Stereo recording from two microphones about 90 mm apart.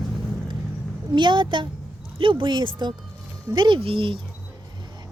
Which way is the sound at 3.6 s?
70° right (ahead or behind).